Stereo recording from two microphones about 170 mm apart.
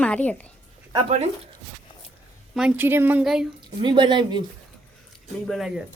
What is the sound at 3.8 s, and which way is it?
Speech, 25° right (ahead or behind).